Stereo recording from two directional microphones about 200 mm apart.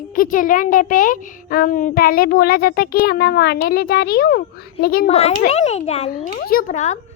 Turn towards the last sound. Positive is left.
turn(degrees=35)  # may be behind; listen again after turning